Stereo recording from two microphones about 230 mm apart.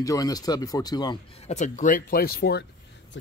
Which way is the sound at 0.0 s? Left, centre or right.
Centre.